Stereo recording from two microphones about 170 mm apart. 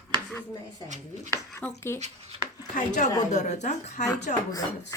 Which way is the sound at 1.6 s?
10° left (ahead or behind).